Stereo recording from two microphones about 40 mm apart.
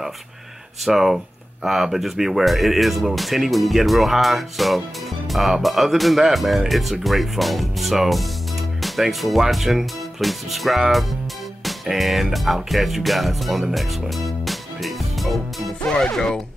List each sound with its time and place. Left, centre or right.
0.8 s speech: centre
11.6 s music: centre